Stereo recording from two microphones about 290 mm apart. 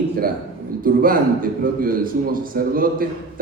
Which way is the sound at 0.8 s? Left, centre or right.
Right.